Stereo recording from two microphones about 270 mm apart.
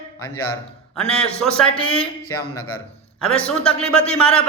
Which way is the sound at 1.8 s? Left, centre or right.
Centre.